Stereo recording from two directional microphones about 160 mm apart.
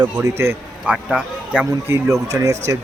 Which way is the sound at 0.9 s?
5° right (ahead or behind).